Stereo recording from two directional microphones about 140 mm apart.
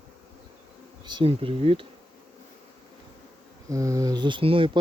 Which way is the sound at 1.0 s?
35° right (ahead or behind).